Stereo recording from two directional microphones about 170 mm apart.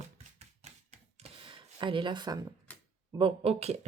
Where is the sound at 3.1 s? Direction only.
35° right (ahead or behind).